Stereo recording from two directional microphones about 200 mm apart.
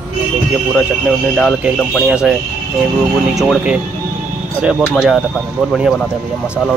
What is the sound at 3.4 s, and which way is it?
Speech, centre (ahead or behind).